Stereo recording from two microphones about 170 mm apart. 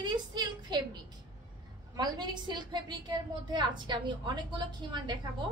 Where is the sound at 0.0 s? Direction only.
25° right (ahead or behind).